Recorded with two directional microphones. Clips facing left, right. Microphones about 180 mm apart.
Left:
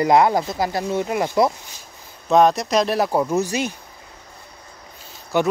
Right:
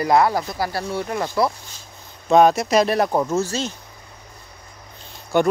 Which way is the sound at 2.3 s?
Centre (ahead or behind).